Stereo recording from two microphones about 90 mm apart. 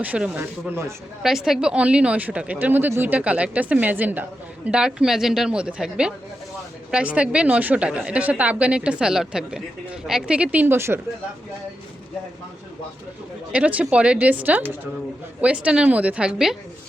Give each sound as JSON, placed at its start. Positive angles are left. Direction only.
{"t": 0.3, "sound": "speech", "side_deg": -30}
{"t": 1.2, "sound": "a woman's voice", "side_deg": -5}
{"t": 10.8, "sound": "speech", "side_deg": -30}
{"t": 13.5, "sound": "a woman's voice", "side_deg": -15}